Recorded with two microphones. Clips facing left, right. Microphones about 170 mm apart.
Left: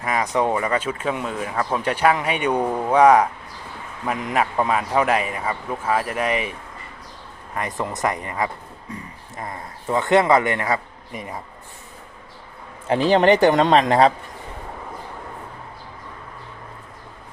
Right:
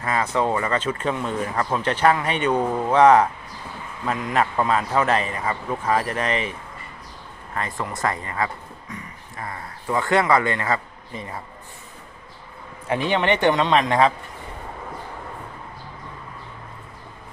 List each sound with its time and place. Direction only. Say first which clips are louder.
0.0 s speech: left 1 dB; 15° left (ahead or behind)
7.5 s speech: left 2 dB; 20° left (ahead or behind)
12.9 s speech: left 6 dB; 35° left (ahead or behind)